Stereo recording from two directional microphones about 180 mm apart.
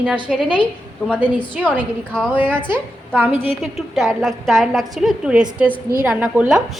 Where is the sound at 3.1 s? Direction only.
10° right (ahead or behind).